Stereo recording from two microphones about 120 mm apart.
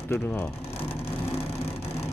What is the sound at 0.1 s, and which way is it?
Speech, 15° left (ahead or behind).